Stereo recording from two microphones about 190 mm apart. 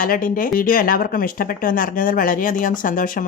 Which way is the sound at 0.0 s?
45° left (ahead or behind).